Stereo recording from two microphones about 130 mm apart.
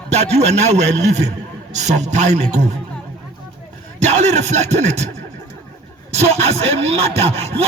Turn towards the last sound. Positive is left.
turn(degrees=-50)  # may be behind; listen again after turning